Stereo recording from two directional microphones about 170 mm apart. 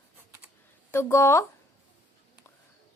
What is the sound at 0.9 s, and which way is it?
Speech, 15° left (ahead or behind).